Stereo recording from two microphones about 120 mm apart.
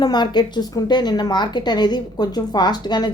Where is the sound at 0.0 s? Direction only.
35° left (ahead or behind).